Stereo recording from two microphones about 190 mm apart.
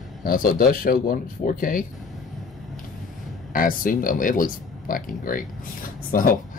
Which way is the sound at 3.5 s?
45° left (ahead or behind).